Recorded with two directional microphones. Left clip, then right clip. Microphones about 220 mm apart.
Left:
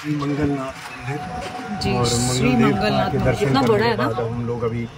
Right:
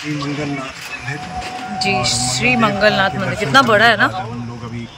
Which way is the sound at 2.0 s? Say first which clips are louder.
Right 4 dB; 5° left (ahead or behind).